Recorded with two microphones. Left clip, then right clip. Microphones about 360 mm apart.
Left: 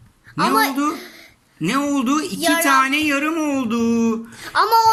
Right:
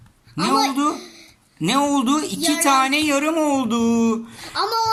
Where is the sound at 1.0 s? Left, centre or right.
Left.